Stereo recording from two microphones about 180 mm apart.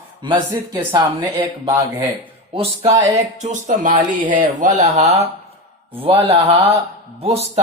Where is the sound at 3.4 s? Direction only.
45° right (ahead or behind).